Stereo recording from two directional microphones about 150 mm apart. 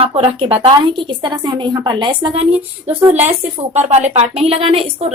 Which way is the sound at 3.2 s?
45° right (ahead or behind).